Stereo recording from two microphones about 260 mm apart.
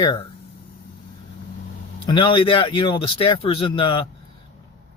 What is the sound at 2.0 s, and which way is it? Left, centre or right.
Speech, centre.